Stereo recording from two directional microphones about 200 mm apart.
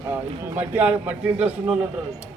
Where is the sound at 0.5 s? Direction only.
10° right (ahead or behind).